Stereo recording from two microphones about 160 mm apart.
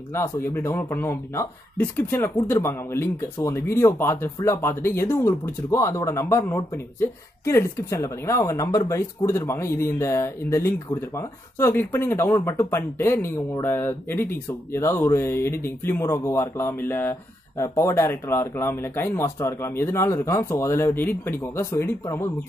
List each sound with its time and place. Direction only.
0.1 s speech: 15° left (ahead or behind)